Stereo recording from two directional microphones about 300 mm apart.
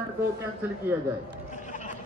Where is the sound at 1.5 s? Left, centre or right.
Left.